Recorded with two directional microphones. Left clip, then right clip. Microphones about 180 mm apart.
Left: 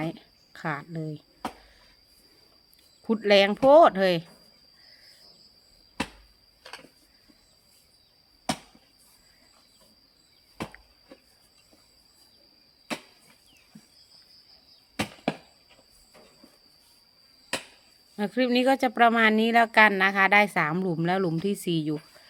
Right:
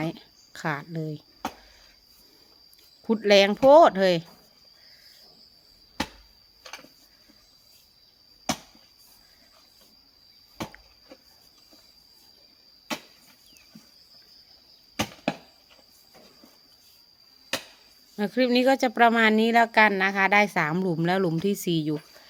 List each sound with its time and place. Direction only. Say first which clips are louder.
0.0 s speech: right 1 dB; 10° right (ahead or behind)
3.1 s a woman's voice: right 1 dB; 5° right (ahead or behind)
14.9 s chop: right 1 dB; 5° right (ahead or behind)
18.2 s a woman's voice: right 2 dB; 5° right (ahead or behind)